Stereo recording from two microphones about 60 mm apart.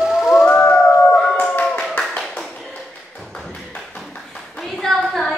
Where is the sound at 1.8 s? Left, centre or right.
Centre.